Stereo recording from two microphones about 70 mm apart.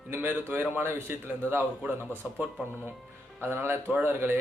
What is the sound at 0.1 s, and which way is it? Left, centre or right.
Speech, right.